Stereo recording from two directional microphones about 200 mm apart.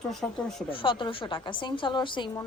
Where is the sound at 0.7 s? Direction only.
25° left (ahead or behind).